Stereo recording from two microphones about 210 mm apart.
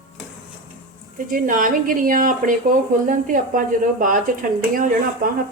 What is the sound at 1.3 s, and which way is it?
Speech, 40° right (ahead or behind).